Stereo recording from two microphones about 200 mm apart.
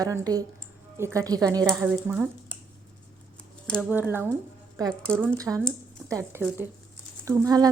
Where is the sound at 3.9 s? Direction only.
10° right (ahead or behind).